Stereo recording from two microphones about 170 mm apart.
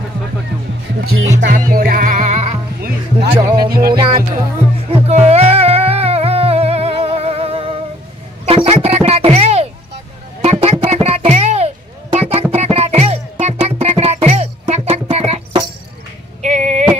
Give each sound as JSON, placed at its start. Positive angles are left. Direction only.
{"t": 1.5, "sound": "music", "side_deg": -55}
{"t": 4.9, "sound": "music", "side_deg": -40}